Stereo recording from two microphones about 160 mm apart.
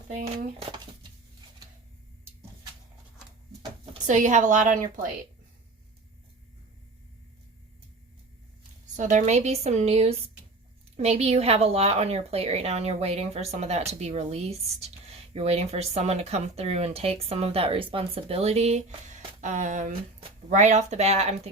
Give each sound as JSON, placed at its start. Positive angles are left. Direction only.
{"t": 0.1, "sound": "speech", "side_deg": -55}
{"t": 4.0, "sound": "a woman's voice", "side_deg": -50}
{"t": 9.0, "sound": "a woman's voice", "side_deg": -50}